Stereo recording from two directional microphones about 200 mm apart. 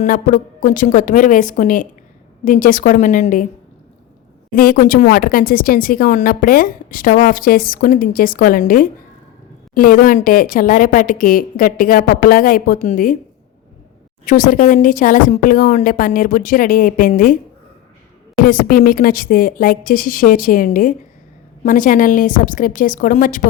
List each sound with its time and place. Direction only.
0.0 s a woman's voice: 40° left (ahead or behind)
4.5 s a woman's voice: 45° left (ahead or behind)
14.3 s a woman's voice: 40° left (ahead or behind)
18.4 s a woman's voice: 45° left (ahead or behind)